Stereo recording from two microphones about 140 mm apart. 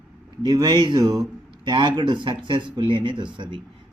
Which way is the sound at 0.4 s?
30° right (ahead or behind).